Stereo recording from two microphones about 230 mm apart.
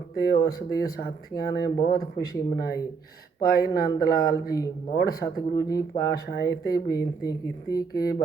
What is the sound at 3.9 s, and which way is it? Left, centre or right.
Speech, centre.